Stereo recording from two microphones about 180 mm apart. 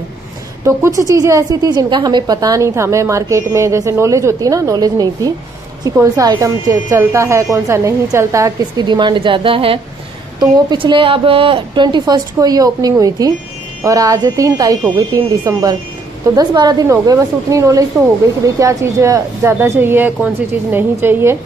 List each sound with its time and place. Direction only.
0.7 s a woman's voice: 15° right (ahead or behind)
16.3 s a woman's voice: 20° right (ahead or behind)